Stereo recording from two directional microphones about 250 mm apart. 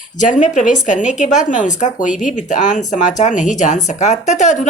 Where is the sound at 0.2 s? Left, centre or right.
Left.